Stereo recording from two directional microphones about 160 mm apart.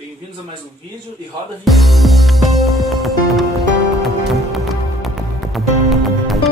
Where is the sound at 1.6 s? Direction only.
Centre (ahead or behind).